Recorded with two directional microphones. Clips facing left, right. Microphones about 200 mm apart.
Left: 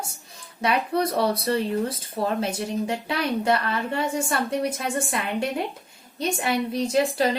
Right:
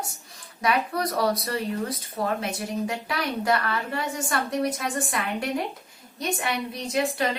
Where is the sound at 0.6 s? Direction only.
25° left (ahead or behind).